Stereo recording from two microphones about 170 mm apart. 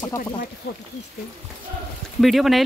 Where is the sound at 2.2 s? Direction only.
Centre (ahead or behind).